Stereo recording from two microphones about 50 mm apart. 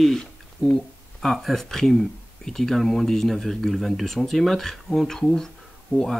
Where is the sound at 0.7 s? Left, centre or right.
Centre.